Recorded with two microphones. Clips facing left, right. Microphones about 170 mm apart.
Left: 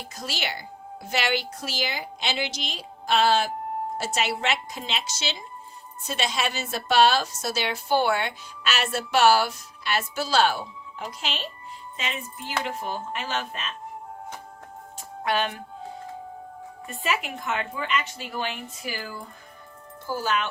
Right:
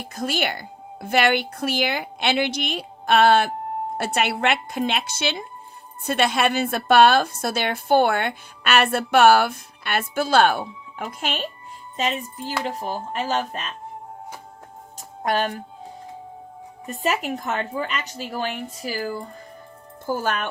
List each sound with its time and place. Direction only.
0.0 s a woman's voice: 55° right (ahead or behind)
11.9 s a woman's voice: 40° right (ahead or behind)
14.9 s speech: 40° right (ahead or behind)
16.8 s a woman's voice: 40° right (ahead or behind)
20.1 s speech: 50° right (ahead or behind)